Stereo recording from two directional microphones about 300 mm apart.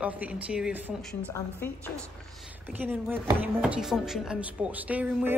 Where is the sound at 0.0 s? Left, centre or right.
Centre.